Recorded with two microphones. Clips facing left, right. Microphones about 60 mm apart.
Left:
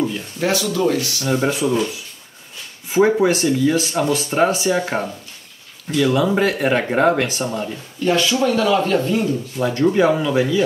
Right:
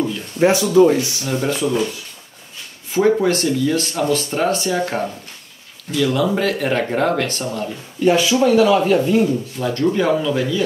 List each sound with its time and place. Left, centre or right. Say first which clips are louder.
0.4 s speech: right 7 dB; right
1.2 s speech: left 1 dB; centre
2.9 s speech: left 1 dB; centre
8.0 s speech: right 3 dB; centre
9.6 s speech: left 3 dB; centre